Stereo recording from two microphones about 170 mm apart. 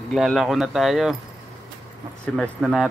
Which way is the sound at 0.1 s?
Centre (ahead or behind).